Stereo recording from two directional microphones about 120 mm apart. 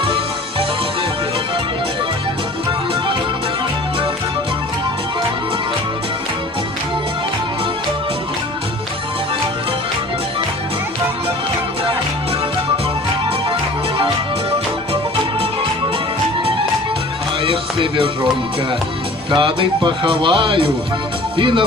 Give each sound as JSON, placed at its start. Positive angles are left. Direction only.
{"t": 17.4, "sound": "music", "side_deg": -50}
{"t": 19.3, "sound": "speech", "side_deg": -45}